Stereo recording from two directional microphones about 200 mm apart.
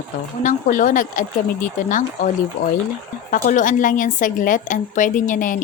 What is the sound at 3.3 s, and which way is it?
A woman's voice, 40° left (ahead or behind).